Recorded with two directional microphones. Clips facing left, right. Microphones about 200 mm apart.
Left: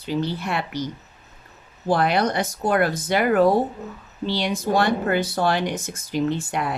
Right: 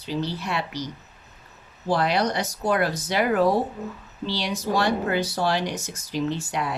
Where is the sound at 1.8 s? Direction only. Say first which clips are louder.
Left 2 dB; 55° left (ahead or behind).